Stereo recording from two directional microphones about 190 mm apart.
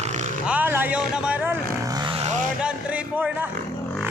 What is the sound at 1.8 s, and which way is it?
Vehicle, 20° right (ahead or behind).